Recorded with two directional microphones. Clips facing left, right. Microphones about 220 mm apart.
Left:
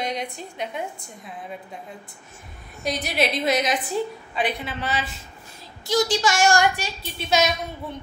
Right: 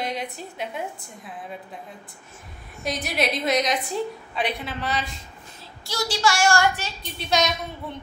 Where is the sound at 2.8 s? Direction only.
Centre (ahead or behind).